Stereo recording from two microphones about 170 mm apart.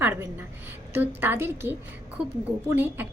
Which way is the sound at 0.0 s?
15° right (ahead or behind).